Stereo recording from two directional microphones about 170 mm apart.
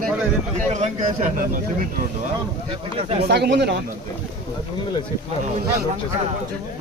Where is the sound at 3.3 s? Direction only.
80° right.